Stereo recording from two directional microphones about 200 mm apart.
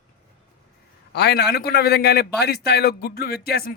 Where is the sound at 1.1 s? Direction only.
55° left (ahead or behind).